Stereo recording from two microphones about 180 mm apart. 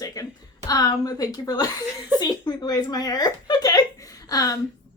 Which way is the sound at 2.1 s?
20° left (ahead or behind).